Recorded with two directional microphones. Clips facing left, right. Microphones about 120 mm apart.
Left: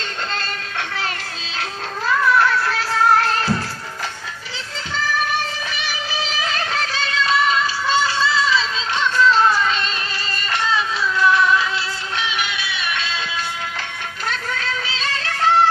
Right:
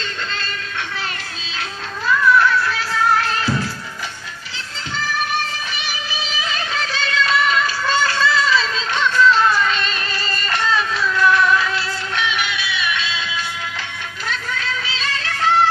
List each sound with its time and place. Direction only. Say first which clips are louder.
1.6 s music: left 2 dB; 55° left (ahead or behind)
6.9 s a sound: right 2 dB; 35° left (ahead or behind)
10.2 s music: right 1 dB; 15° left (ahead or behind)
12.2 s music: right 2 dB; 35° left (ahead or behind); by 13.4 s 50° left (ahead or behind)
14.2 s music: even; 40° left (ahead or behind)